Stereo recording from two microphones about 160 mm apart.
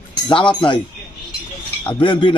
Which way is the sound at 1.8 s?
30° left (ahead or behind).